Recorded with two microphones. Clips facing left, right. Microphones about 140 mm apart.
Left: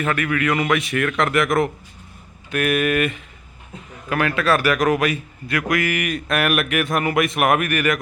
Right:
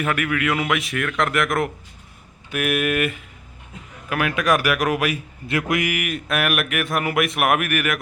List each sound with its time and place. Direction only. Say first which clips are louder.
0.0 s a man's voice: left 1 dB; 5° right (ahead or behind)
5.5 s speech: left 1 dB; 25° right (ahead or behind)
5.9 s a man's voice: left 2 dB; 5° right (ahead or behind)